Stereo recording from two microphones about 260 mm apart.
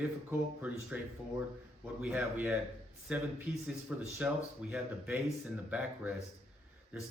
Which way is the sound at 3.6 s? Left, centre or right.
Centre.